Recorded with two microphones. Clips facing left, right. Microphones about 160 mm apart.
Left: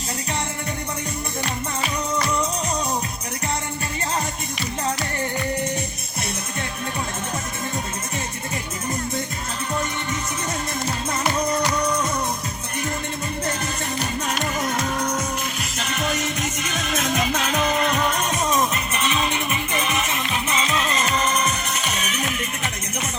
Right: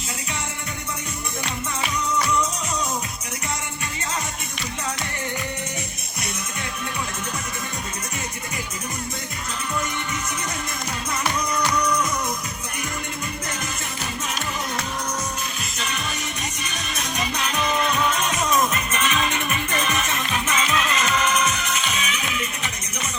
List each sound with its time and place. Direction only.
11.3 s music: 30° left (ahead or behind)
16.0 s music: 90° left
17.7 s music: 55° left (ahead or behind)
18.3 s music: 30° left (ahead or behind); by 22.4 s 45° left (ahead or behind)